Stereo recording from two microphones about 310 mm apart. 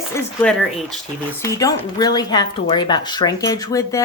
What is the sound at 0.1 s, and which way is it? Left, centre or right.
Speech, centre.